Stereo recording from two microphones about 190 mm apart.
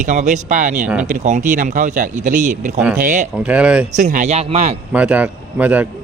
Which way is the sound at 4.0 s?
40° right (ahead or behind).